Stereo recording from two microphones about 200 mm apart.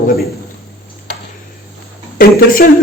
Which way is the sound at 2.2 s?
45° left (ahead or behind).